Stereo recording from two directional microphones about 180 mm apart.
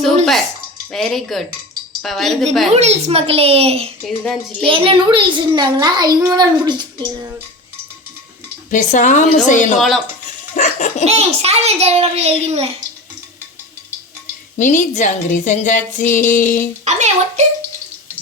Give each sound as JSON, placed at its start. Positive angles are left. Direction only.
{"t": 0.9, "sound": "a woman's voice", "side_deg": 0}
{"t": 2.7, "sound": "a child's voice", "side_deg": -35}
{"t": 4.0, "sound": "a woman's voice", "side_deg": 0}
{"t": 4.6, "sound": "a child's voice", "side_deg": -30}
{"t": 8.7, "sound": "speech", "side_deg": 45}
{"t": 9.7, "sound": "a woman's voice", "side_deg": 0}
{"t": 10.5, "sound": "laughter", "side_deg": 45}
{"t": 11.0, "sound": "a child's voice", "side_deg": -35}
{"t": 14.6, "sound": "speech", "side_deg": 45}
{"t": 16.8, "sound": "a child's voice", "side_deg": -40}